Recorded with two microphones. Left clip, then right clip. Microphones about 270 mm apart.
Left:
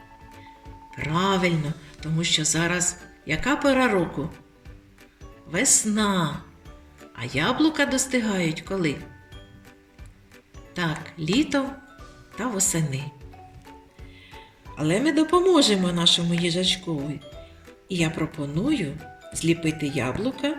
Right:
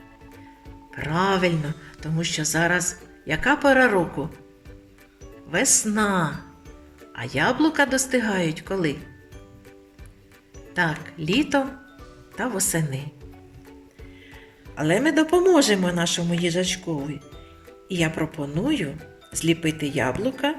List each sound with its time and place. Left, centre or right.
0.9 s speech: right
5.5 s speech: right
10.8 s speech: right
14.8 s speech: right